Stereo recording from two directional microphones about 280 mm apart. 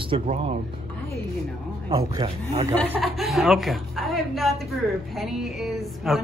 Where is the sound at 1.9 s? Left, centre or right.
Centre.